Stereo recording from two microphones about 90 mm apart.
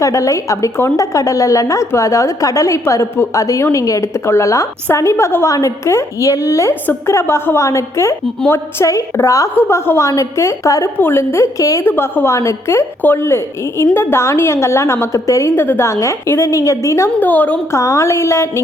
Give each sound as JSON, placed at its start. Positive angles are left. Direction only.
{"t": 0.0, "sound": "a woman's voice", "side_deg": 35}
{"t": 11.0, "sound": "a woman's voice", "side_deg": 25}
{"t": 17.2, "sound": "a woman's voice", "side_deg": 20}
{"t": 17.7, "sound": "a woman's voice", "side_deg": 35}